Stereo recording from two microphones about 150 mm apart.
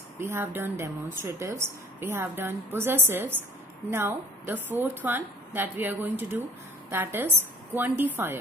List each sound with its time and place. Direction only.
0.3 s speech: 15° right (ahead or behind)